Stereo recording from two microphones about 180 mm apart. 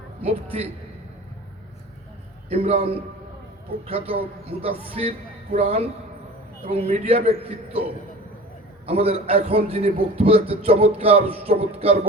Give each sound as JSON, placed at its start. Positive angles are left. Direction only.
{"t": 2.5, "sound": "a man's voice", "side_deg": -35}
{"t": 8.9, "sound": "a man's voice", "side_deg": -35}